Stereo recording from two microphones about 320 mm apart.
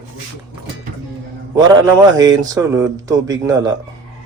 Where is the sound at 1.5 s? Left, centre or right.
Centre.